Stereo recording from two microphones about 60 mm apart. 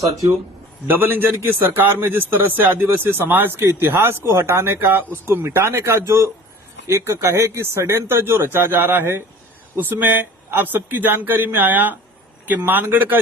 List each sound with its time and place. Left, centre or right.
0.9 s a man's voice: right